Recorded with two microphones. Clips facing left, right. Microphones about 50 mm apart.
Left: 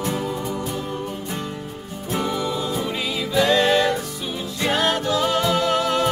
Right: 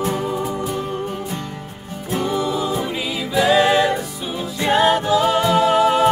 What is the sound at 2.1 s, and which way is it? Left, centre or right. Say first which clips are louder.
Music: right 3 dB; centre.